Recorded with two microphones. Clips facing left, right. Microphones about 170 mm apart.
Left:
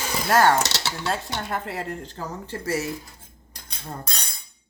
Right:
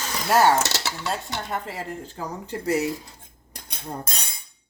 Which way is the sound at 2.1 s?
15° right (ahead or behind).